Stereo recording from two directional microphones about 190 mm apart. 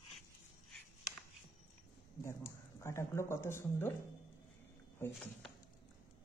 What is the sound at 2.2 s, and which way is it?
Speech, 15° left (ahead or behind).